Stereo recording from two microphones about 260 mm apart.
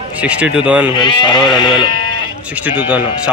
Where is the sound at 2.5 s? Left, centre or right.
Centre.